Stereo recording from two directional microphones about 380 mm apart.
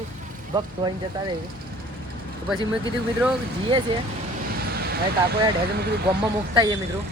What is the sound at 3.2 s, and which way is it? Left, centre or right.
Speech, centre.